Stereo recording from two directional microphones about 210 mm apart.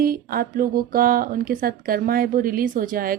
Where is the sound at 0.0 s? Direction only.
45° right (ahead or behind).